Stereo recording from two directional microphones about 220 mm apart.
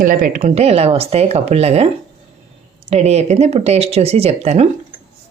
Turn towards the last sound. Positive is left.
turn(degrees=-30)  # may be behind; listen again after turning